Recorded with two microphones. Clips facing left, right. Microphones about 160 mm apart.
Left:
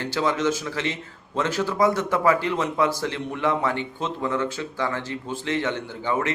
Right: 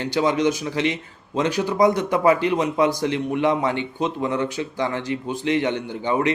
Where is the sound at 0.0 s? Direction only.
20° right (ahead or behind).